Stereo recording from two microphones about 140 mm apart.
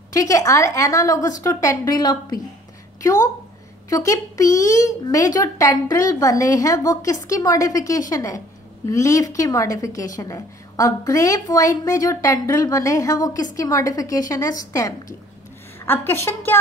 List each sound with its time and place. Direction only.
0.1 s a woman's voice: 25° left (ahead or behind)